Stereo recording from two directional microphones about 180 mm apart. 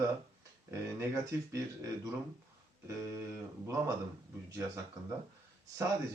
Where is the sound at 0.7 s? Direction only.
15° right (ahead or behind).